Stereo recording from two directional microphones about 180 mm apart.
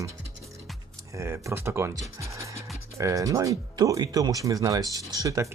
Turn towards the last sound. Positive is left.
turn(degrees=-20)  # may be behind; listen again after turning